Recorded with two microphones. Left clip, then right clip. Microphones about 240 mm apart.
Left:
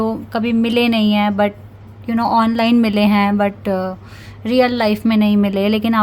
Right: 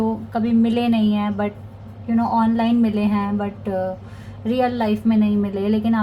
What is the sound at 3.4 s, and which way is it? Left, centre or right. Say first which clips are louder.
A woman's voice: left 6 dB; left.